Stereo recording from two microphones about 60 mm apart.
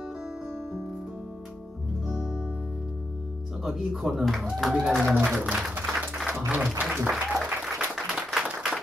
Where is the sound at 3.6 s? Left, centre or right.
Centre.